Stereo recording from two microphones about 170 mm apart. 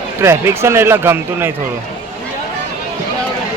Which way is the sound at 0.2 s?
15° right (ahead or behind).